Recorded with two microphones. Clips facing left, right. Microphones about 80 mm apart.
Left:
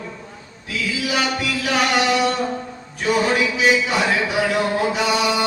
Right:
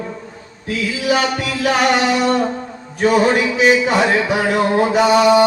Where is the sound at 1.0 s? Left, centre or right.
Right.